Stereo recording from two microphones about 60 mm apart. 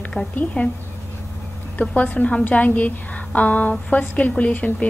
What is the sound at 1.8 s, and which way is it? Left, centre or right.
A woman's voice, left.